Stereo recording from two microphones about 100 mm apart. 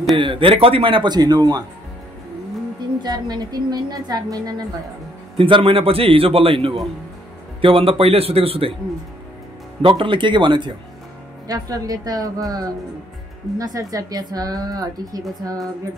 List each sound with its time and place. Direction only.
0.1 s a man's voice: 55° right (ahead or behind); by 1.6 s 40° right (ahead or behind)
3.0 s speech: 45° right (ahead or behind)
5.4 s a man's voice: 60° right (ahead or behind)
9.8 s a man's voice: 60° right (ahead or behind)
11.4 s speech: 40° right (ahead or behind)